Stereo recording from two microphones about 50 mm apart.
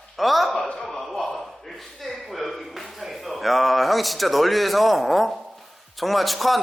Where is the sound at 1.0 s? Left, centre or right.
Centre.